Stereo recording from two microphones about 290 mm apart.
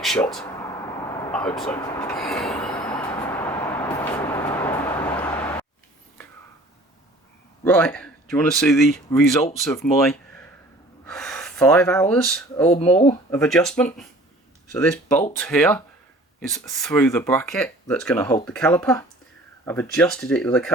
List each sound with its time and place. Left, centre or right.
0.0 s speech: centre
1.9 s train: centre
2.7 s vehicle: centre
7.6 s speech: centre
12.7 s speech: left
13.3 s speech: centre